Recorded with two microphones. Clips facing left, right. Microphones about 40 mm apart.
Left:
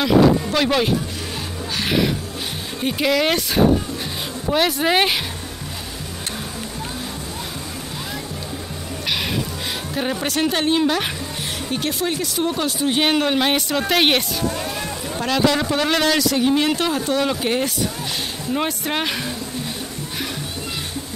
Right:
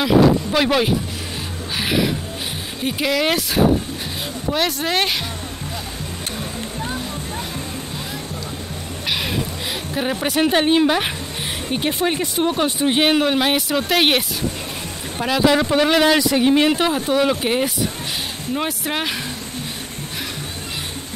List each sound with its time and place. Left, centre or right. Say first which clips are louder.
0.0 s a sound: even; centre
2.8 s speech: left 1 dB; centre
9.9 s speech: right 2 dB; centre
13.0 s speech: right 1 dB; centre
15.1 s speech: right 2 dB; centre
18.5 s speech: left 1 dB; centre